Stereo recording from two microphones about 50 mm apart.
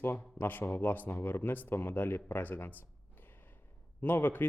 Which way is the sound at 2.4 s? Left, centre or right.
Left.